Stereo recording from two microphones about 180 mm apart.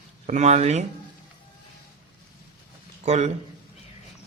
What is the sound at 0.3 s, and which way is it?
Speech, 40° right (ahead or behind).